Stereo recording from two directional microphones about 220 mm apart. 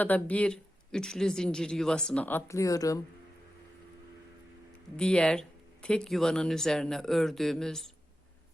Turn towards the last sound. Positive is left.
turn(degrees=0)  # may be behind; listen again after turning